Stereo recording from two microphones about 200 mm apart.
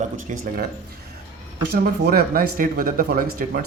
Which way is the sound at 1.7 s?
50° right (ahead or behind).